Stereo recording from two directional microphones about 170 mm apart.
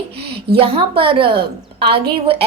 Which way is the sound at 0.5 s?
30° right (ahead or behind).